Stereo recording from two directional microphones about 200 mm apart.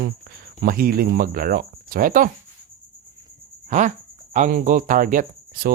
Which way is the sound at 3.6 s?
35° right (ahead or behind).